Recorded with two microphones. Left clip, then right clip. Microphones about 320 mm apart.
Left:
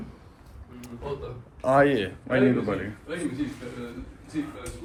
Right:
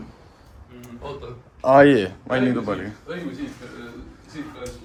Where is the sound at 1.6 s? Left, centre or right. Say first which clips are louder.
Right 7 dB; centre.